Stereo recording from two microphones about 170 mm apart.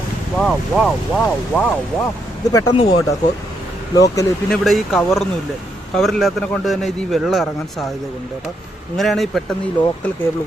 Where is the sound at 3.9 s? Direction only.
20° left (ahead or behind).